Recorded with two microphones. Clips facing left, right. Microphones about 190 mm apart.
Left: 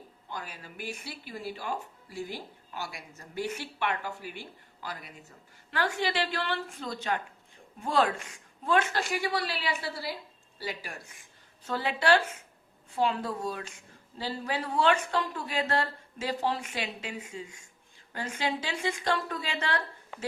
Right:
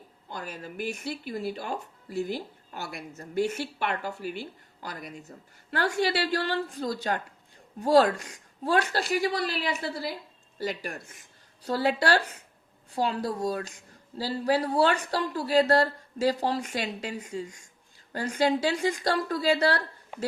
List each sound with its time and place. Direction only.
0.3 s a woman's voice: 45° right (ahead or behind)